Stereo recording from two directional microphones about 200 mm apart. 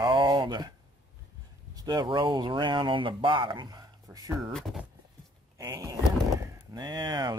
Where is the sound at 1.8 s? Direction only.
20° right (ahead or behind).